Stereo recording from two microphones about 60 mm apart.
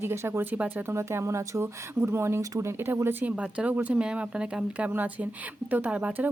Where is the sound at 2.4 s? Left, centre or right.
Right.